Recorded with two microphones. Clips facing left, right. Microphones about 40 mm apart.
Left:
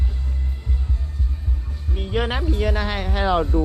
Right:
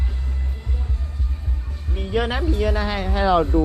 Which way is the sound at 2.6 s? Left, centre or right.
Left.